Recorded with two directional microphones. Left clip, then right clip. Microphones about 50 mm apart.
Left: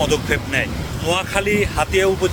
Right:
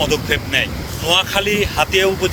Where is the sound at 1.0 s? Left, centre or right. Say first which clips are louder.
Right 4 dB; left.